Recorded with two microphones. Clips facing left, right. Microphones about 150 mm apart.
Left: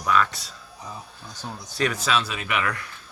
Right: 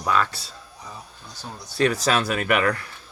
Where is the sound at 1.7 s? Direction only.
35° right (ahead or behind); by 2.7 s 50° right (ahead or behind).